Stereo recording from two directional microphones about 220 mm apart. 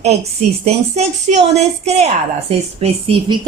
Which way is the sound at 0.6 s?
30° right (ahead or behind).